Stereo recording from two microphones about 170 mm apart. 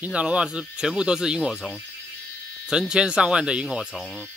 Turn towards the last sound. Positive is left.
turn(degrees=0)  # may be behind; listen again after turning